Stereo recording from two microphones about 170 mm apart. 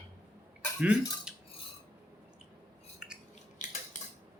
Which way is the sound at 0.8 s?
5° right (ahead or behind).